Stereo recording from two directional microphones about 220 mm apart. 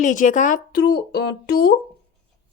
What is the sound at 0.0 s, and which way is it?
Speech, 35° left (ahead or behind).